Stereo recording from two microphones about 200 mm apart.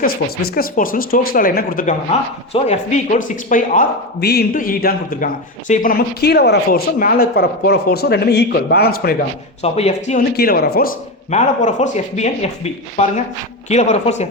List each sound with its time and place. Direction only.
0.0 s speech: 45° left (ahead or behind)
9.6 s speech: 30° left (ahead or behind)
10.3 s speech: 50° left (ahead or behind)
11.3 s speech: 35° left (ahead or behind)